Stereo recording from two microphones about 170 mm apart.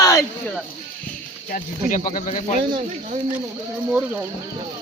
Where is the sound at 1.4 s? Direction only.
50° left (ahead or behind).